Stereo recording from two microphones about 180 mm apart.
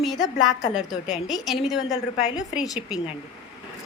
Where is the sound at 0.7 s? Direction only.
Centre (ahead or behind).